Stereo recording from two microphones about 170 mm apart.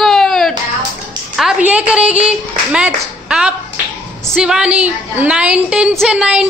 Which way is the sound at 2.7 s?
5° right (ahead or behind).